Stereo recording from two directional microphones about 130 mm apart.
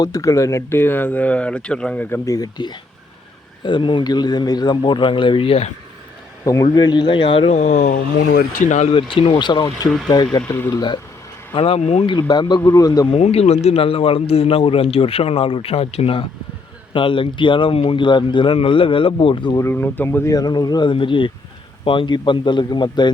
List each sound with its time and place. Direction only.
0.0 s speech: 25° left (ahead or behind); by 2.0 s 10° left (ahead or behind)
2.0 s speech: 20° left (ahead or behind); by 5.7 s 50° left (ahead or behind)
6.4 s speech: 25° left (ahead or behind); by 7.5 s 45° left (ahead or behind)
7.5 s speech: 65° left (ahead or behind)
8.9 s a man's voice: 45° left (ahead or behind)
11.5 s speech: 45° left (ahead or behind); by 13.1 s 30° left (ahead or behind)
13.1 s a man's voice: 50° left (ahead or behind)
19.5 s speech: 20° left (ahead or behind); by 23.1 s 35° left (ahead or behind)